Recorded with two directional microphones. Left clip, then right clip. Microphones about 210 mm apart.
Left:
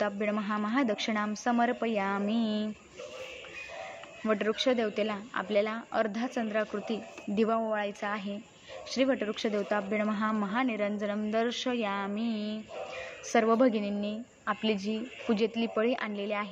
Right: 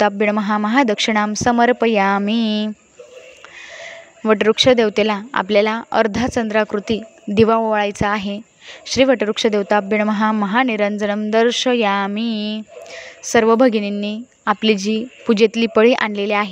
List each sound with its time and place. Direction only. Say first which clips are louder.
0.0 s speech: right 15 dB; 50° right (ahead or behind)
3.8 s speech: right 15 dB; 50° right (ahead or behind)